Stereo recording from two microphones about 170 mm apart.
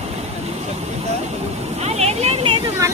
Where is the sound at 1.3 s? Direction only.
40° right (ahead or behind).